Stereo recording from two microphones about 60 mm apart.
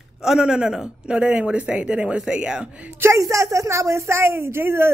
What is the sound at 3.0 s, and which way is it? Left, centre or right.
Speech, right.